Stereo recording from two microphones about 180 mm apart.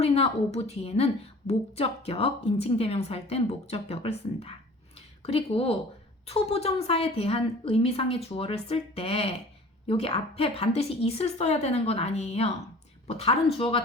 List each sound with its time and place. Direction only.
0.0 s a woman's voice: 35° left (ahead or behind)